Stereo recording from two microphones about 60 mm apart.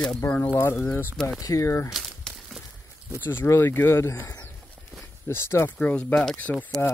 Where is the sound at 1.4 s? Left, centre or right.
Left.